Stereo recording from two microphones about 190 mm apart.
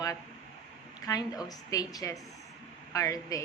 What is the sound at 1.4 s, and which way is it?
A woman's voice, 20° left (ahead or behind).